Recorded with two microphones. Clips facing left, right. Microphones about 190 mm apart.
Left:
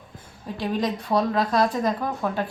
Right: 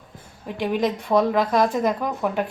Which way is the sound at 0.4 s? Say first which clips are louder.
Right 3 dB; 15° right (ahead or behind).